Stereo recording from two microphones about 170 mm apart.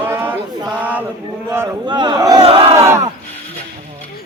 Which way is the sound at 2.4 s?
30° right (ahead or behind).